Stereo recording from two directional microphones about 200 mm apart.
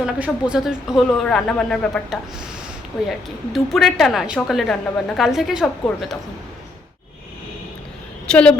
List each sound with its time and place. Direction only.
0.0 s speech: 5° right (ahead or behind)
8.3 s a woman's voice: 5° left (ahead or behind)